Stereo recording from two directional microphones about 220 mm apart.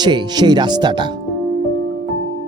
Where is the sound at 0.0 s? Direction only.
20° right (ahead or behind).